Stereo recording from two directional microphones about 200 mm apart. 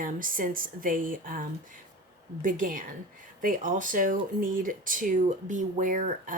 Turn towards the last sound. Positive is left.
turn(degrees=-40)  # may be behind; listen again after turning